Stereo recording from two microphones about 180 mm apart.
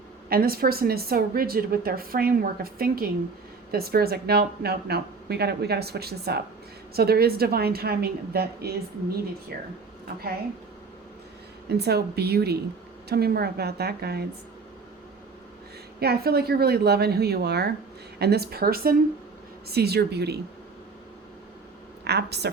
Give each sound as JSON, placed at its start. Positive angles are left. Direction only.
{"t": 0.3, "sound": "a woman's voice", "side_deg": -55}
{"t": 11.7, "sound": "a woman's voice", "side_deg": -65}
{"t": 16.0, "sound": "a woman's voice", "side_deg": -60}
{"t": 22.0, "sound": "speech", "side_deg": -65}